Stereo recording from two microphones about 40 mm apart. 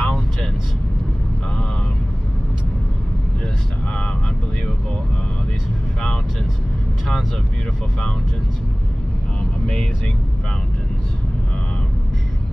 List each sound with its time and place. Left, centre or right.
0.0 s vehicle: left